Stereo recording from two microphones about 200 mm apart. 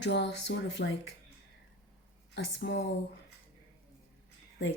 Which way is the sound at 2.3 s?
60° left (ahead or behind).